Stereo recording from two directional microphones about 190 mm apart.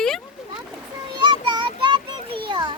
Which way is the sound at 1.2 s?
25° right (ahead or behind).